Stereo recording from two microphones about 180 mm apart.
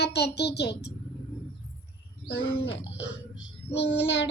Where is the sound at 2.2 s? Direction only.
75° left (ahead or behind).